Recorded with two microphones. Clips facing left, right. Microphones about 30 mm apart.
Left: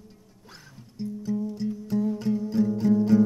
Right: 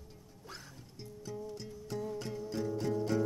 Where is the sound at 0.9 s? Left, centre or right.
Centre.